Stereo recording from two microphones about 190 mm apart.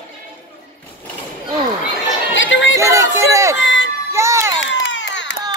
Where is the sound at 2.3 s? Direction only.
80° left.